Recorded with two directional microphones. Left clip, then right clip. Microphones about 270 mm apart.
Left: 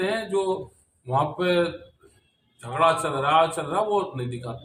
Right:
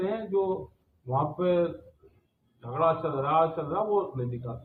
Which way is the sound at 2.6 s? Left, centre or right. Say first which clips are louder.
Left 5 dB; left.